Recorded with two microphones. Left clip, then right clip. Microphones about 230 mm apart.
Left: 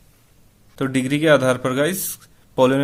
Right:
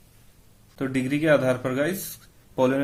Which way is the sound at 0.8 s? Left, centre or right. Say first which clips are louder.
Left 5 dB; left.